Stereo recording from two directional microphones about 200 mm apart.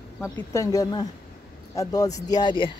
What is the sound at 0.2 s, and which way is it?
Speech, 15° left (ahead or behind).